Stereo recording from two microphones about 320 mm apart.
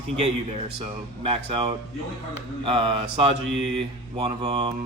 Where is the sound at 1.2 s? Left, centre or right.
Centre.